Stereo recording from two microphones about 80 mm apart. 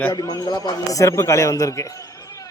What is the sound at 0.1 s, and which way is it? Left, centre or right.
Speech, left.